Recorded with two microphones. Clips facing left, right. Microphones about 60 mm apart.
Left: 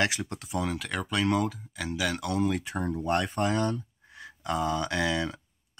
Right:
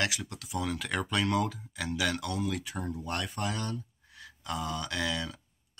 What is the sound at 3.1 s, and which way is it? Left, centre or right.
Speech, left.